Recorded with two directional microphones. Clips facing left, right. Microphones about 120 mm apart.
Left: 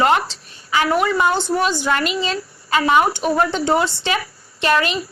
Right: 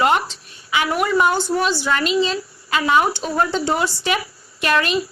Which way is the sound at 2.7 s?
25° left (ahead or behind).